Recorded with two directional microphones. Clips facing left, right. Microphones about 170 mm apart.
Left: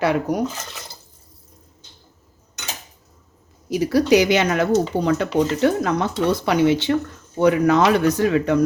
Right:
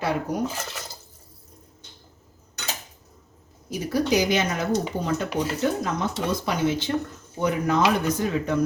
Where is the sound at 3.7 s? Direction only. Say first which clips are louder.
Left 7 dB; 75° left (ahead or behind).